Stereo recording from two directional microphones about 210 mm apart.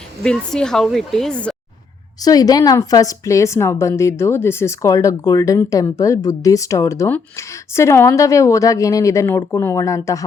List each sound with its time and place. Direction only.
0.2 s speech: 5° left (ahead or behind)
2.2 s a woman's voice: 20° left (ahead or behind)